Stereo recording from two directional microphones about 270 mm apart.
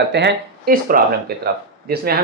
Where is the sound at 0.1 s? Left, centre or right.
Right.